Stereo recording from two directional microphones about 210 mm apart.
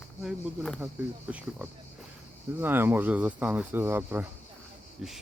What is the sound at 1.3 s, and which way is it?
Speech, 10° right (ahead or behind).